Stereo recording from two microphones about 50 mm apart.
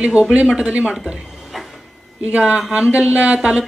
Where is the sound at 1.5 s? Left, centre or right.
Centre.